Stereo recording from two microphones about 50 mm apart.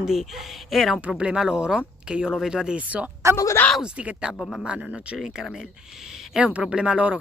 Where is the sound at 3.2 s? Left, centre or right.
Right.